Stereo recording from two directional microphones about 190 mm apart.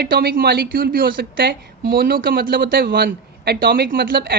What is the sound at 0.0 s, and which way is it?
Speech, 55° right (ahead or behind).